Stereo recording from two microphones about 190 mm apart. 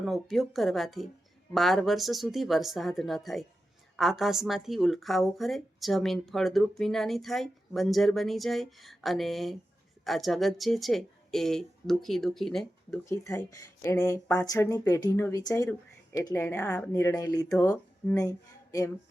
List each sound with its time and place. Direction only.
0.0 s speech: centre (ahead or behind)
13.1 s speech: 15° left (ahead or behind)